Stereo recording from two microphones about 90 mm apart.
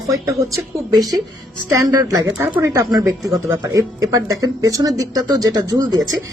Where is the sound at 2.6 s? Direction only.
40° right (ahead or behind).